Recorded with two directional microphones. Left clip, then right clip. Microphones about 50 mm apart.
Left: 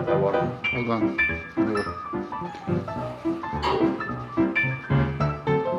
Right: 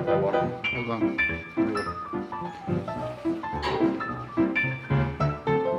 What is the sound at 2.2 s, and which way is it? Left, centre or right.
Music, centre.